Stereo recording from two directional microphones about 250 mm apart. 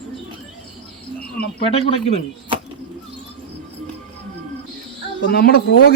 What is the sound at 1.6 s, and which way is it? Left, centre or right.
Speech, left.